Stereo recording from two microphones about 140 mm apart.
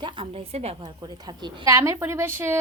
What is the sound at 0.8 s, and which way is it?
A woman's voice, 30° right (ahead or behind).